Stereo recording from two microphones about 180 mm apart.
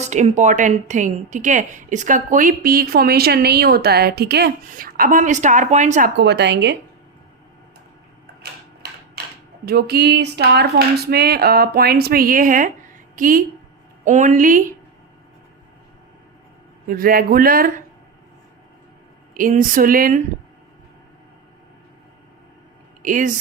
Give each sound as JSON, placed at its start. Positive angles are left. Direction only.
{"t": 0.0, "sound": "a woman's voice", "side_deg": -40}
{"t": 6.1, "sound": "a woman's voice", "side_deg": -70}
{"t": 9.6, "sound": "a woman's voice", "side_deg": -60}
{"t": 16.9, "sound": "a woman's voice", "side_deg": -55}
{"t": 19.3, "sound": "a woman's voice", "side_deg": -50}
{"t": 23.0, "sound": "a woman's voice", "side_deg": -45}